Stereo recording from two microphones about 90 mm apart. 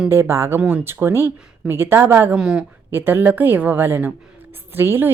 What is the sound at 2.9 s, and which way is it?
A woman's voice, 25° right (ahead or behind).